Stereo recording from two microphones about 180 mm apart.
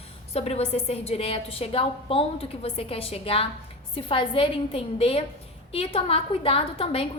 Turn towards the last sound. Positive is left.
turn(degrees=30)  # may be behind; listen again after turning